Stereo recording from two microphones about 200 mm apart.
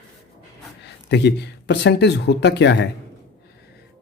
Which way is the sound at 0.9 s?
60° left (ahead or behind).